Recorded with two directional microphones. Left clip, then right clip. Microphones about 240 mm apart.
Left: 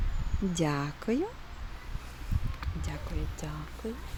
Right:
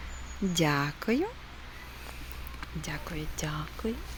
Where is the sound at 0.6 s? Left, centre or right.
Centre.